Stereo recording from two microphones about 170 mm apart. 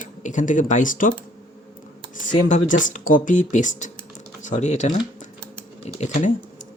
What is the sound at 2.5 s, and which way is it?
Speech, 45° left (ahead or behind).